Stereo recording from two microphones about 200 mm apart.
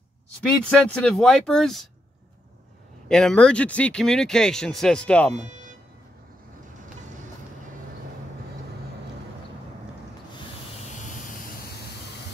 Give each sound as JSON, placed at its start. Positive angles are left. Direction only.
{"t": 0.7, "sound": "speech", "side_deg": 5}
{"t": 3.1, "sound": "speech", "side_deg": 5}
{"t": 10.3, "sound": "a sound", "side_deg": 35}